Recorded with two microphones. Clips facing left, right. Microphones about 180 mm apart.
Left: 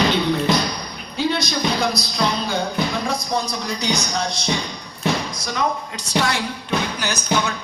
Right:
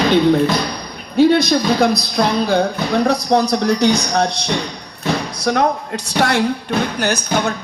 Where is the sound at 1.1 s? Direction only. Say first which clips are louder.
Right 10 dB; 55° right (ahead or behind).